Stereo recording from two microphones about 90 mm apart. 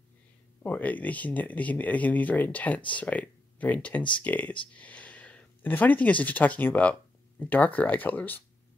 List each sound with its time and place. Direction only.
0.7 s speech: 20° left (ahead or behind)